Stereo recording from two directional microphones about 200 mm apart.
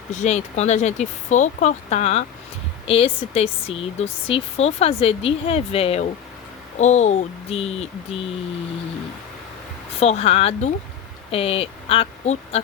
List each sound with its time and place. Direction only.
0.1 s speech: 35° left (ahead or behind)
10.0 s a woman's voice: 30° left (ahead or behind)